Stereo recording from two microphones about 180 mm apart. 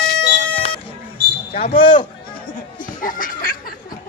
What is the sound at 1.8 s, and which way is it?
Speech, 30° left (ahead or behind).